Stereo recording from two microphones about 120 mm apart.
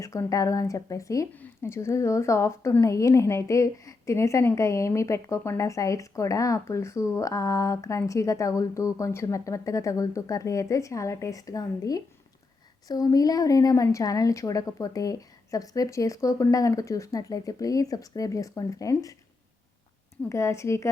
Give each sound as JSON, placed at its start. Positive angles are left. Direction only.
{"t": 0.0, "sound": "a woman's voice", "side_deg": 25}
{"t": 20.3, "sound": "a woman's voice", "side_deg": 25}